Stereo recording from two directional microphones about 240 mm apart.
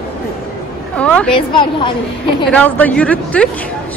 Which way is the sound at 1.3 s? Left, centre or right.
Centre.